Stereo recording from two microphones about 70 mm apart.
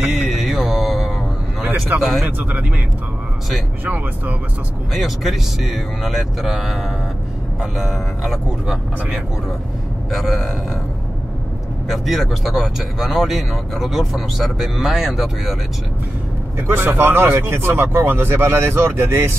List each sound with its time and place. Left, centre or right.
0.0 s mantra: centre
0.7 s music: centre
2.0 s speech: centre
2.3 s speech: right
3.8 s speech: right
4.9 s speech: centre
10.1 s speech: centre
11.9 s speech: centre
16.6 s speech: right